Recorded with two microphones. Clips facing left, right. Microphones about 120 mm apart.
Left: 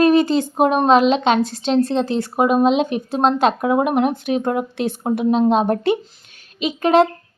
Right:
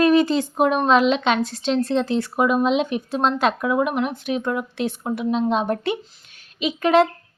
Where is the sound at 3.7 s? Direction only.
50° left (ahead or behind).